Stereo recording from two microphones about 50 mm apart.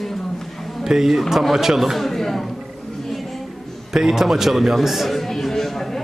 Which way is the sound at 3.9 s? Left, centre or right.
Centre.